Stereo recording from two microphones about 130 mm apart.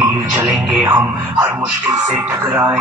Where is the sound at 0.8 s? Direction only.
25° right (ahead or behind).